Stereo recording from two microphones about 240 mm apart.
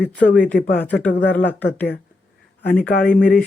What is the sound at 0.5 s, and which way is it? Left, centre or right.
Speech, left.